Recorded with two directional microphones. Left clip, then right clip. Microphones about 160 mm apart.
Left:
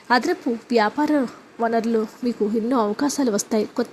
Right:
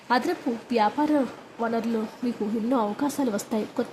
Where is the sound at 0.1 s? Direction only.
25° left (ahead or behind).